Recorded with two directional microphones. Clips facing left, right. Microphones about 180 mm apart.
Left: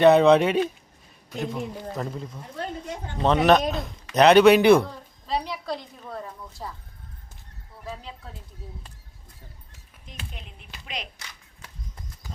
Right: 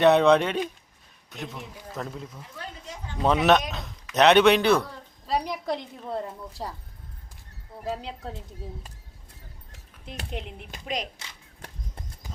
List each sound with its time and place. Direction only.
0.0 s speech: centre (ahead or behind)
2.6 s a sound: 50° left (ahead or behind)
3.2 s speech: 5° right (ahead or behind)
4.6 s speech: 10° left (ahead or behind)
5.2 s a sound: 10° right (ahead or behind)
6.1 s speech: 25° right (ahead or behind)
10.1 s speech: 65° right (ahead or behind)
10.7 s a woman's voice: 45° right (ahead or behind)